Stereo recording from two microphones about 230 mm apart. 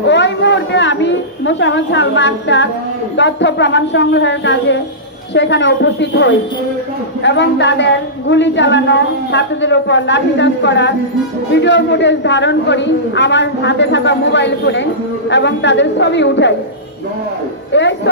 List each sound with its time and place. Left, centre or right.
0.0 s a woman's voice: left
17.7 s a man's voice: left